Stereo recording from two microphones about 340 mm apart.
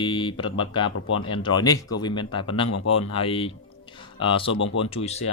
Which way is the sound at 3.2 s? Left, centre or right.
Centre.